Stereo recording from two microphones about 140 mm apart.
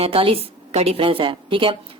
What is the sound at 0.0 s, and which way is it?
Speech, 40° right (ahead or behind).